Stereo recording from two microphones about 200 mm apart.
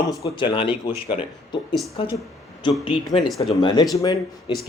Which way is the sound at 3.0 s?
Centre (ahead or behind).